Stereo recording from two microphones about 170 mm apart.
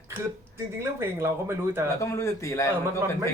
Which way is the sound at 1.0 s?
15° right (ahead or behind).